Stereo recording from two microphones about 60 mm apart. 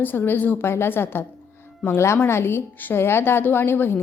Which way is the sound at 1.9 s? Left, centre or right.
Left.